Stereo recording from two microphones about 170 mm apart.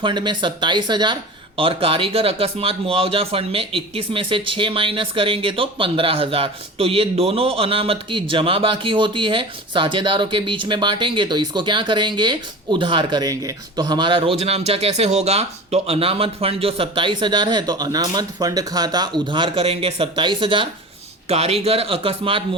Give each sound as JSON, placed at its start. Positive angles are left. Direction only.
{"t": 0.0, "sound": "speech", "side_deg": -25}